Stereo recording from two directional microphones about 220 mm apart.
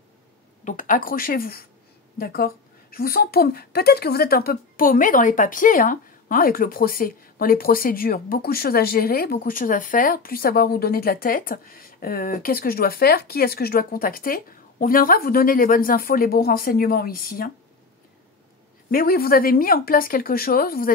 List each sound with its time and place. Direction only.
0.7 s a woman's voice: 35° left (ahead or behind)
18.9 s a woman's voice: 40° left (ahead or behind)